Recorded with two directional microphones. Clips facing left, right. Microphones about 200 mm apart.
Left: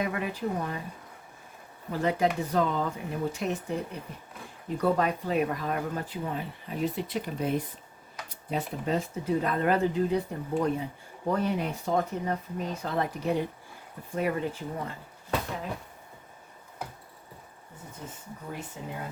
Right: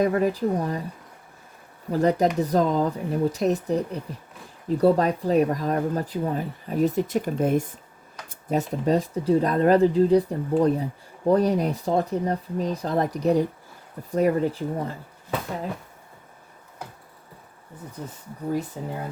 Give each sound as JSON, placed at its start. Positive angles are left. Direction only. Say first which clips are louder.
{"t": 0.0, "sound": "speech", "louder": "right 9 dB", "side_deg": -40}
{"t": 1.9, "sound": "speech", "louder": "right 6 dB", "side_deg": -40}
{"t": 18.8, "sound": "speech", "louder": "right 6 dB", "side_deg": -40}